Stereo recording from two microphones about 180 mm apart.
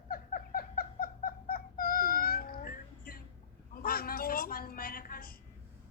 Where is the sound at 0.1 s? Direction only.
50° left (ahead or behind).